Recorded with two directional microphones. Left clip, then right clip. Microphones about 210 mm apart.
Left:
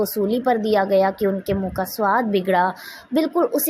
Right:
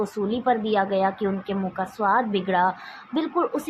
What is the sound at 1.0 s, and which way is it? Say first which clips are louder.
A woman's voice: left 4 dB; 35° left (ahead or behind).